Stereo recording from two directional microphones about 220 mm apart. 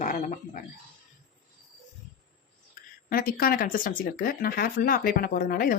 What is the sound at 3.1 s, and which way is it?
Speech, 40° left (ahead or behind).